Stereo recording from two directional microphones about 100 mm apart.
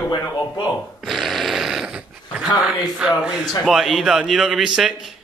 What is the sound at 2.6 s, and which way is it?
A man's voice, 5° right (ahead or behind).